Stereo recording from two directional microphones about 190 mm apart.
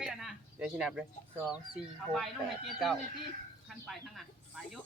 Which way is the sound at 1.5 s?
5° right (ahead or behind).